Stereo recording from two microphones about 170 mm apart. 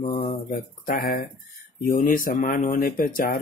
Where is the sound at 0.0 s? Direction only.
40° left (ahead or behind).